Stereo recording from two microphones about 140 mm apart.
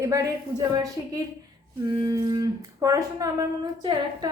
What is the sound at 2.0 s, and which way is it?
A woman's voice, 30° right (ahead or behind).